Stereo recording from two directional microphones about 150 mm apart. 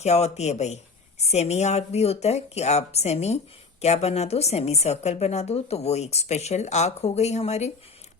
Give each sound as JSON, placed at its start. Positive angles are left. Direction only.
{"t": 0.0, "sound": "speech", "side_deg": 45}